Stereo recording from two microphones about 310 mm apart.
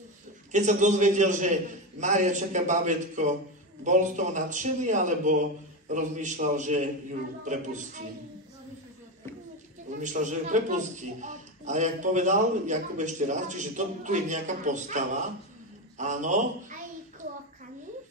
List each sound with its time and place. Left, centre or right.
0.5 s a man's voice: right
9.9 s a man's voice: right